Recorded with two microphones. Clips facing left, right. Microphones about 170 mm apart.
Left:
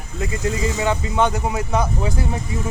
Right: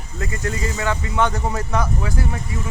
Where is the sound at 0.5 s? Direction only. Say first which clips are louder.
Left 3 dB; 90° left.